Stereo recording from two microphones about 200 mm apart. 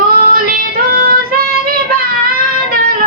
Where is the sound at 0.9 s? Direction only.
50° right (ahead or behind).